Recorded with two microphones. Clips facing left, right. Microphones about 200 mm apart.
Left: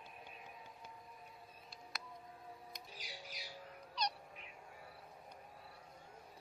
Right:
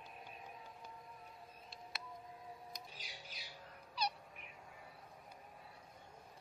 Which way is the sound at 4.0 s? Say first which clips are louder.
Even; 5° right (ahead or behind).